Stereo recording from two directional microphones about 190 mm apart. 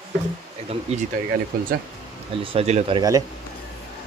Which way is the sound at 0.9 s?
35° right (ahead or behind).